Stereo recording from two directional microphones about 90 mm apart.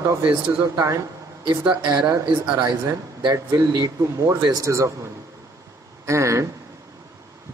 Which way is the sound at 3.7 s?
40° right (ahead or behind).